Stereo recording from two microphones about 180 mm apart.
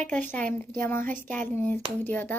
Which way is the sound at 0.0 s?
10° left (ahead or behind).